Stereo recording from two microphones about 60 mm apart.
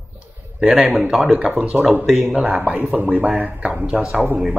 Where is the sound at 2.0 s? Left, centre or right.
Centre.